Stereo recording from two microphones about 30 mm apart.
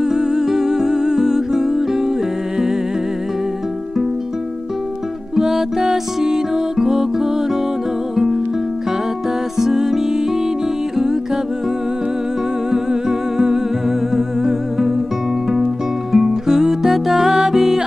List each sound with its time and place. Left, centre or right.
0.0 s humming: centre
5.3 s music: right
9.6 s music: centre
12.7 s music: right
14.1 s music: centre